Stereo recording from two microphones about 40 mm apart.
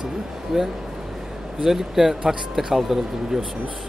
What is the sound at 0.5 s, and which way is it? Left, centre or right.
Speech, centre.